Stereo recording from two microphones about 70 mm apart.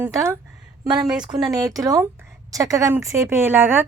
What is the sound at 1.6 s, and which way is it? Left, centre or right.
A woman's voice, right.